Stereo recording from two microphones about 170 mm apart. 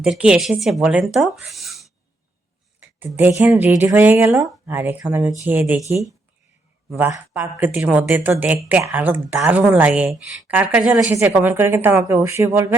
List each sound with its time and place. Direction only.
0.0 s speech: 5° right (ahead or behind)
3.0 s speech: 10° right (ahead or behind)